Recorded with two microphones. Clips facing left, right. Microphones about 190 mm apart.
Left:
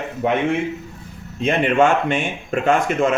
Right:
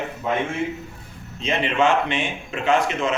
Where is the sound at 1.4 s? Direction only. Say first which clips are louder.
Left 4 dB; 50° left (ahead or behind).